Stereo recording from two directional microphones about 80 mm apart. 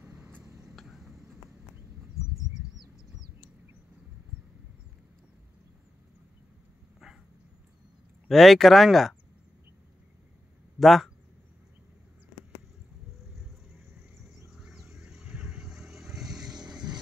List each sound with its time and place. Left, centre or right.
0.0 s vehicle: right
0.5 s a sound: right
0.7 s a sound: centre
8.3 s speech: centre
10.8 s speech: centre
14.5 s vehicle: centre